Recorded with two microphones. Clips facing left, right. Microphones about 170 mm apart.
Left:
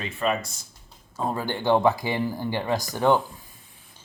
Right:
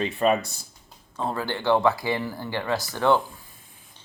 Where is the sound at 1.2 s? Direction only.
15° left (ahead or behind).